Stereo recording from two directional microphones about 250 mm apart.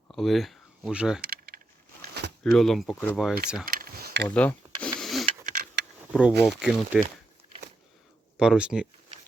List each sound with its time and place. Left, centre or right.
0.1 s speech: centre
1.2 s keys jangling: right
2.4 s speech: centre
3.7 s a sound: right
4.4 s rub: centre
5.2 s a sound: right
6.1 s speech: centre
8.4 s speech: centre